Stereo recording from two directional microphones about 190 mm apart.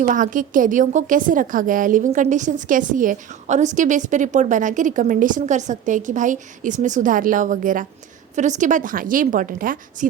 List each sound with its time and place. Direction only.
0.0 s a woman's voice: 45° right (ahead or behind)